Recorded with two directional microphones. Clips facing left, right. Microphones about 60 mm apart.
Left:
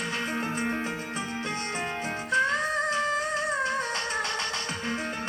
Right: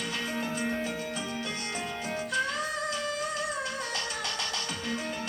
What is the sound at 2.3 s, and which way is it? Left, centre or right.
Music, left.